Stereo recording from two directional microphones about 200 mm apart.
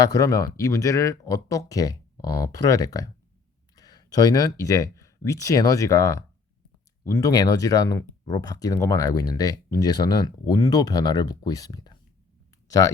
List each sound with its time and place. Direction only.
0.0 s speech: 15° left (ahead or behind)